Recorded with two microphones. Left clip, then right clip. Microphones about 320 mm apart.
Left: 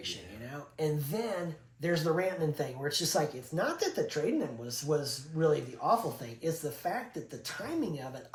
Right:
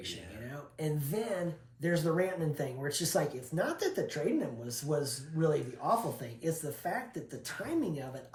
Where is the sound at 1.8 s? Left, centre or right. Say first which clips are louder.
Left 1 dB; centre.